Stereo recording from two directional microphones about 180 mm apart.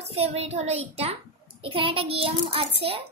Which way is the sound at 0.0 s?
35° right (ahead or behind).